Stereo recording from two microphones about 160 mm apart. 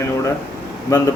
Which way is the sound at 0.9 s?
20° left (ahead or behind).